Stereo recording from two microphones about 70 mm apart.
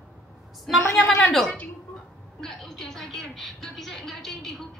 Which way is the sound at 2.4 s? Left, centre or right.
Centre.